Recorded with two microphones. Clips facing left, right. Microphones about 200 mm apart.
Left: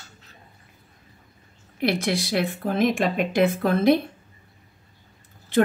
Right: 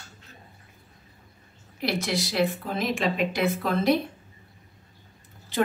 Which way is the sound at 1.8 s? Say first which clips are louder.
Left 4 dB; 55° left (ahead or behind).